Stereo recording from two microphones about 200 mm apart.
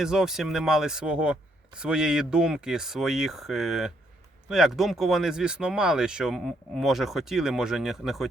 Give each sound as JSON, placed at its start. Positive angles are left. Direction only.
{"t": 0.0, "sound": "speech", "side_deg": 0}